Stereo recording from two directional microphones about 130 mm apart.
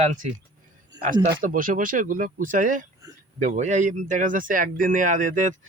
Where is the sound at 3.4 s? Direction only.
65° right (ahead or behind).